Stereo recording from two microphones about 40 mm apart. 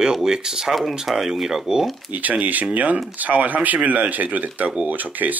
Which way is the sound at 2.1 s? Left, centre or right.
Right.